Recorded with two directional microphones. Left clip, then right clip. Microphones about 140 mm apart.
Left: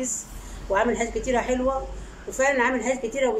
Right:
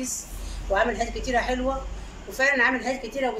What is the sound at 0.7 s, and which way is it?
A woman's voice, 20° left (ahead or behind).